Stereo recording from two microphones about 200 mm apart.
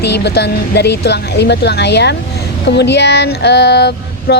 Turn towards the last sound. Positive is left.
turn(degrees=55)  # may be behind; listen again after turning